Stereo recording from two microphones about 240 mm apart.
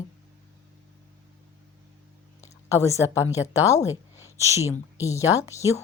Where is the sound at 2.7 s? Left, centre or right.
Centre.